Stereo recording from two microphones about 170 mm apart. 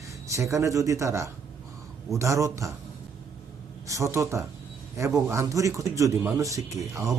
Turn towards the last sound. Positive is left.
turn(degrees=-20)  # may be behind; listen again after turning